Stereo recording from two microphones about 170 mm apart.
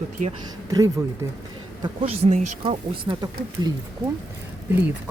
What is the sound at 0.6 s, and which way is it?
Speech, 20° right (ahead or behind).